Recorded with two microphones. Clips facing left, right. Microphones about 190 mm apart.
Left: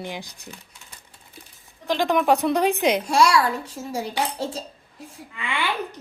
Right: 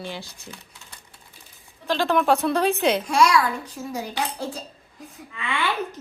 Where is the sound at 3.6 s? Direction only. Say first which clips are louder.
Left 1 dB; 25° left (ahead or behind).